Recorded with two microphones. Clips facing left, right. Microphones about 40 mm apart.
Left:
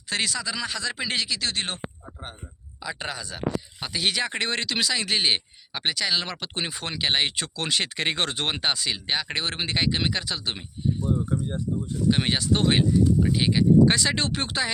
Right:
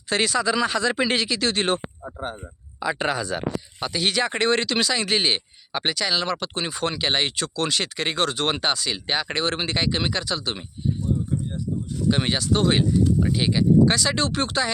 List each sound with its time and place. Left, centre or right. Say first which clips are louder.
0.1 s speech: right 6 dB; centre
2.8 s speech: right 8 dB; right
3.8 s speech: right 5 dB; centre; by 8.4 s left
8.4 s speech: right 3 dB; centre
9.0 s speech: right 5 dB; centre
11.0 s speech: left 1 dB; left
12.1 s speech: right 2 dB; centre
12.4 s speech: right 1 dB; centre
13.2 s speech: even; centre
13.8 s speech: right 1 dB; left